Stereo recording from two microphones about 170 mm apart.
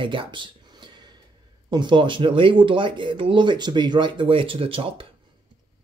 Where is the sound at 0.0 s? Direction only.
30° right (ahead or behind).